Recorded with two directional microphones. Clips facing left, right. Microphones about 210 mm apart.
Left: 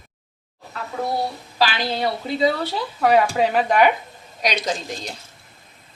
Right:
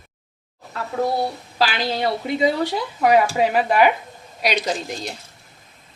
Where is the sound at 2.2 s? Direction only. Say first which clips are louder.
Right 1 dB; 15° right (ahead or behind).